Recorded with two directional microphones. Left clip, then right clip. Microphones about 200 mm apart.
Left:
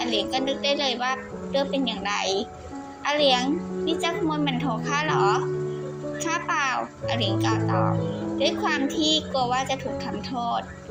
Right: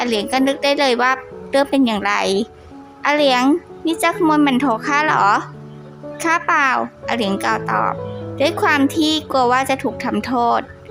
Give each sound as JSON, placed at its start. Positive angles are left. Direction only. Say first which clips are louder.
{"t": 0.0, "sound": "a woman's voice", "louder": "right 7 dB", "side_deg": -35}